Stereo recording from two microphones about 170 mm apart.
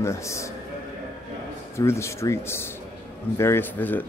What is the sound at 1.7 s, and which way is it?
A man's voice, 15° left (ahead or behind).